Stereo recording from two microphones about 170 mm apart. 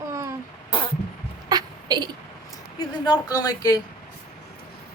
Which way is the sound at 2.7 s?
25° left (ahead or behind).